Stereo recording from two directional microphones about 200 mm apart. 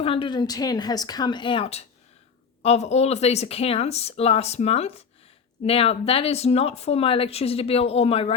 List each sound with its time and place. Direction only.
0.0 s speech: 25° left (ahead or behind)